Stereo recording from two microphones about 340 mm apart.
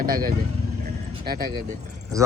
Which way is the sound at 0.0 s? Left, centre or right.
Right.